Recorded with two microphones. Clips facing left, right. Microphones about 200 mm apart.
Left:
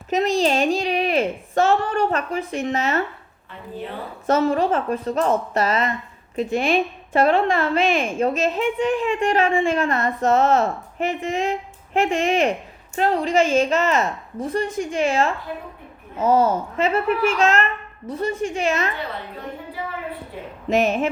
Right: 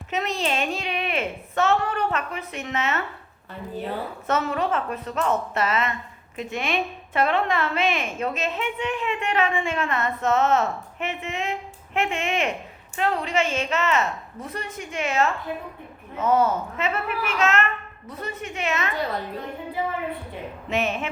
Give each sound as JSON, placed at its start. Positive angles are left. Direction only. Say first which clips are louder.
{"t": 0.1, "sound": "a woman's voice", "louder": "left 7 dB", "side_deg": 35}
{"t": 4.3, "sound": "a woman's voice", "louder": "left 6 dB", "side_deg": 35}
{"t": 20.7, "sound": "a woman's voice", "louder": "left 7 dB", "side_deg": 40}